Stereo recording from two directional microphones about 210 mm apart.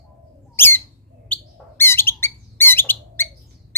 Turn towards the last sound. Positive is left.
turn(degrees=10)  # may be behind; listen again after turning